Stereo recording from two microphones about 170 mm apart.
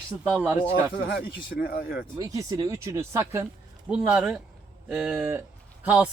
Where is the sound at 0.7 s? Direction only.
65° left (ahead or behind).